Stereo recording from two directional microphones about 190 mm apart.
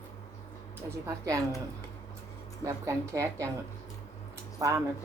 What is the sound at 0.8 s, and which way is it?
Speech, 15° right (ahead or behind).